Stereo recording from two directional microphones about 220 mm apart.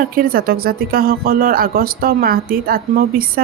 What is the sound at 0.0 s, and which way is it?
Speech, 40° right (ahead or behind).